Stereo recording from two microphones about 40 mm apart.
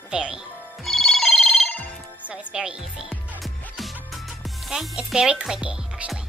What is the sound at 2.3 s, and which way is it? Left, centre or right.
Speech, right.